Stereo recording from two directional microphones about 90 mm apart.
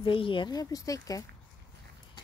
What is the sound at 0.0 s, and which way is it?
Speech, 75° left (ahead or behind).